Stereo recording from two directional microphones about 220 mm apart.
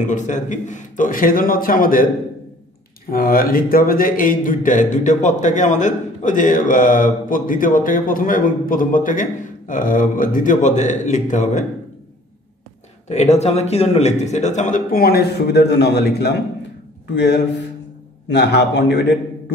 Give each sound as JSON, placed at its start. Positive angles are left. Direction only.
{"t": 0.0, "sound": "a man's voice", "side_deg": 35}
{"t": 3.1, "sound": "a man's voice", "side_deg": 40}
{"t": 13.1, "sound": "a man's voice", "side_deg": 30}